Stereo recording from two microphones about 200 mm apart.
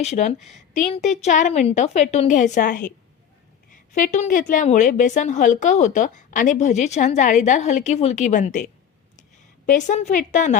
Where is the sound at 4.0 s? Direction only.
40° left (ahead or behind).